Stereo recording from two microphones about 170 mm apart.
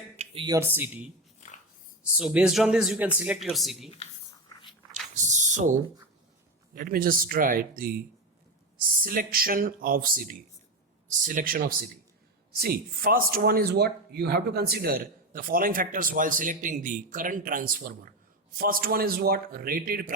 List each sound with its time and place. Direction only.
0.4 s speech: 15° right (ahead or behind)
2.1 s speech: 5° right (ahead or behind)
4.9 s a sound: 45° right (ahead or behind)
6.7 s speech: 60° right (ahead or behind)
9.0 s speech: 60° right (ahead or behind)